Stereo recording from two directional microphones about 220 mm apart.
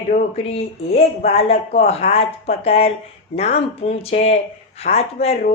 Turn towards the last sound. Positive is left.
turn(degrees=30)  # may be behind; listen again after turning